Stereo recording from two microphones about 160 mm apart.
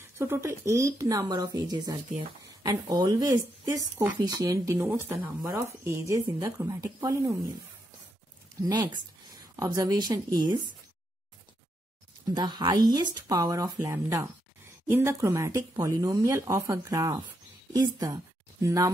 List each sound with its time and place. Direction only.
0.2 s speech: 15° right (ahead or behind)
8.5 s speech: 25° right (ahead or behind)
12.4 s a woman's voice: 25° right (ahead or behind)